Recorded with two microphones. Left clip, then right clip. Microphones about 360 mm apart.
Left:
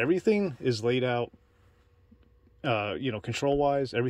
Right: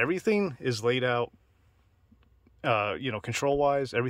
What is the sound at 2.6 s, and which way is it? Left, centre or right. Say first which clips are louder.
Speech: right 2 dB; centre.